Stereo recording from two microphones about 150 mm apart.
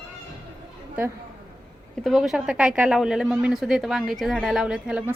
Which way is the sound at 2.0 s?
Centre (ahead or behind).